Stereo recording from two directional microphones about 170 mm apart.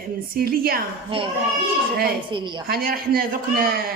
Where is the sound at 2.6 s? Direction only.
60° right (ahead or behind).